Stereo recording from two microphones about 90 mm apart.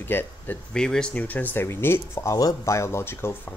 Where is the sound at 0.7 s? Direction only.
10° left (ahead or behind); by 3.5 s 25° left (ahead or behind).